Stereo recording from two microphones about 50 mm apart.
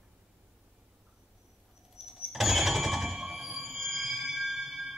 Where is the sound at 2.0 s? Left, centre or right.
Centre.